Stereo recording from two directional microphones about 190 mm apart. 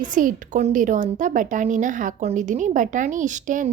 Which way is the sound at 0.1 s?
45° right (ahead or behind).